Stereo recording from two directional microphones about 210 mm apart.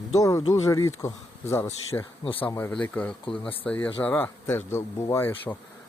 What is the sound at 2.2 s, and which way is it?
Speech, 25° left (ahead or behind).